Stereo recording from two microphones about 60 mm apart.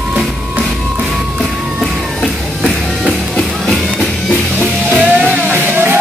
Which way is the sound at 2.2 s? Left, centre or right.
Centre.